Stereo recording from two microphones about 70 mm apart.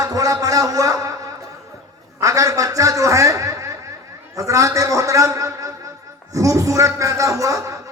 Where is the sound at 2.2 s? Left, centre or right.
Right.